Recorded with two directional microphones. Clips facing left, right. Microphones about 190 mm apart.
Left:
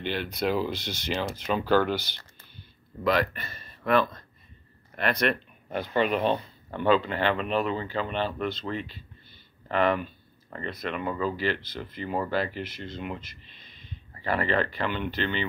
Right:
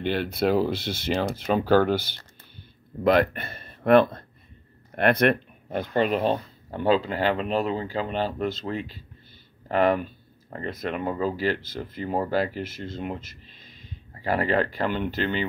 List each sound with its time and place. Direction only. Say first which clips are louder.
0.0 s speech: right 4 dB; 50° right (ahead or behind)